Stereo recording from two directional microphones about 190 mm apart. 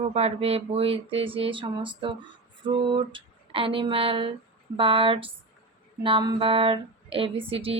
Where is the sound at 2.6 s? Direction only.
25° right (ahead or behind).